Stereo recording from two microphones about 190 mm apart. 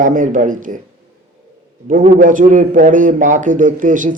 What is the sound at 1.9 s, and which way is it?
A man's voice, 45° right (ahead or behind).